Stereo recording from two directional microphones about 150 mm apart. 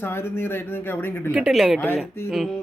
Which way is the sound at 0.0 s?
15° left (ahead or behind).